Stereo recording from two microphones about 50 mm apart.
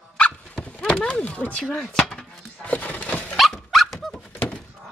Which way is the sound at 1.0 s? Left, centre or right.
Left.